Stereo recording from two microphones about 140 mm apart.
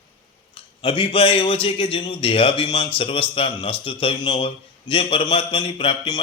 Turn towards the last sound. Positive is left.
turn(degrees=40)  # may be behind; listen again after turning